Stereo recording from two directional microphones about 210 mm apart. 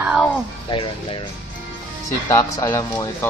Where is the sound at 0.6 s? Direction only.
25° left (ahead or behind).